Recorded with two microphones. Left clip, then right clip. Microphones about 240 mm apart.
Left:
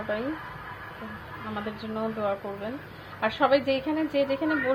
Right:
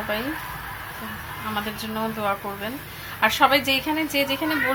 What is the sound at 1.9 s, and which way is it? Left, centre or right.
A woman's voice, centre.